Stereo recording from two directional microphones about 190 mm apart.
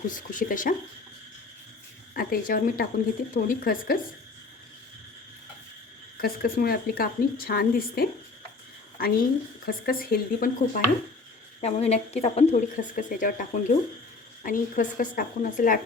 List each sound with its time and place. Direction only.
0.1 s a woman's voice: 45° left (ahead or behind)
2.1 s a woman's voice: 50° left (ahead or behind)
6.1 s a woman's voice: 50° left (ahead or behind)
9.6 s a woman's voice: 50° left (ahead or behind)
11.6 s a woman's voice: 35° left (ahead or behind)